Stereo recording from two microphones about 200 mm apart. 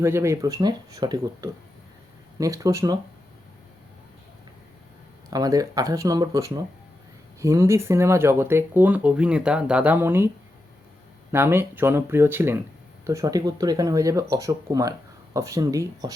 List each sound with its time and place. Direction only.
0.0 s speech: 15° right (ahead or behind)
5.3 s speech: 20° right (ahead or behind)
11.3 s speech: 10° right (ahead or behind)